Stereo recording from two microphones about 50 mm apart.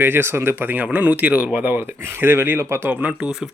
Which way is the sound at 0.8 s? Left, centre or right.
Right.